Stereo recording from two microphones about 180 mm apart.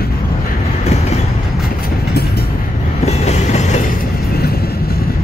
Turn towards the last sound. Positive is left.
turn(degrees=40)  # may be behind; listen again after turning